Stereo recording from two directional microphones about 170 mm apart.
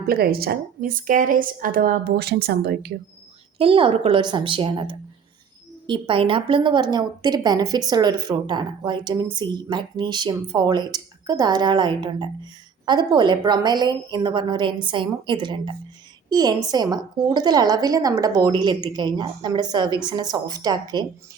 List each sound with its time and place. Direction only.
0.1 s a woman's voice: 65° right (ahead or behind)
3.6 s speech: 30° right (ahead or behind)